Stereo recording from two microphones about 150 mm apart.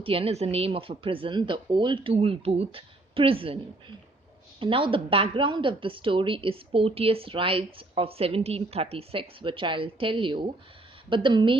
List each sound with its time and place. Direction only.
0.0 s speech: 40° right (ahead or behind)
4.6 s speech: 35° right (ahead or behind)